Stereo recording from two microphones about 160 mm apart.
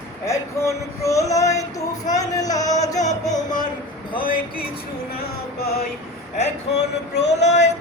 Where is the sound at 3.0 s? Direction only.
50° left (ahead or behind).